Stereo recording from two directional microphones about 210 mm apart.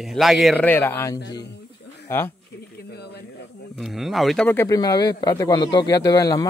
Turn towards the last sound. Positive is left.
turn(degrees=15)  # may be behind; listen again after turning